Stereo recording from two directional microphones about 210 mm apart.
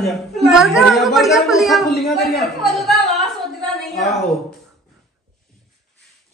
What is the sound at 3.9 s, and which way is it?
Speech, 30° left (ahead or behind).